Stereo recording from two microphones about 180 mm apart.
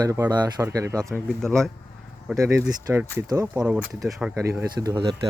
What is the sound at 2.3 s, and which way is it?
Speech, 20° right (ahead or behind).